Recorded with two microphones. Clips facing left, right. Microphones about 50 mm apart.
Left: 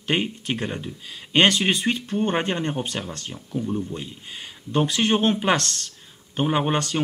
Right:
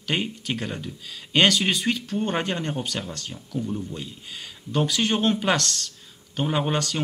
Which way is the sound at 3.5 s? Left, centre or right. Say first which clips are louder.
Left 3 dB; centre.